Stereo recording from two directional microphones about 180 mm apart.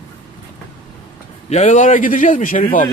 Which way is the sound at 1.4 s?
40° left (ahead or behind).